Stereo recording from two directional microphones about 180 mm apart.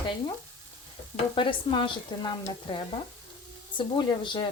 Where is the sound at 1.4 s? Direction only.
30° left (ahead or behind).